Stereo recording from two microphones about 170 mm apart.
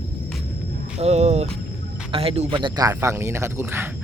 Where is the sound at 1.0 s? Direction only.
40° right (ahead or behind).